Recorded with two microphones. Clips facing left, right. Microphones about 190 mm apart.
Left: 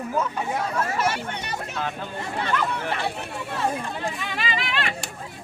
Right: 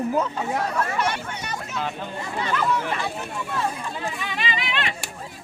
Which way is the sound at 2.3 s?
60° left (ahead or behind).